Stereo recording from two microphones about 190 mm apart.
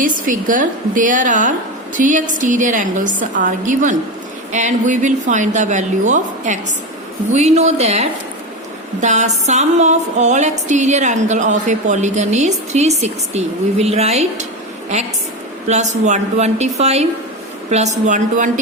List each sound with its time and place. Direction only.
0.0 s a woman's voice: 45° right (ahead or behind)
4.5 s music: 40° right (ahead or behind)
15.6 s music: 35° right (ahead or behind)